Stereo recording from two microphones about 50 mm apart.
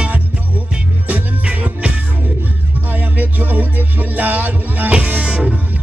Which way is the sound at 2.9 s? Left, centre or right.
Right.